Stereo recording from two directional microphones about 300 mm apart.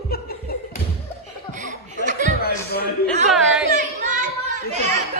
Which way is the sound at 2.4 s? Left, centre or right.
Left.